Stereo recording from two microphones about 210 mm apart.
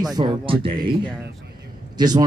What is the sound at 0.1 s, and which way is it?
Speech, 25° right (ahead or behind).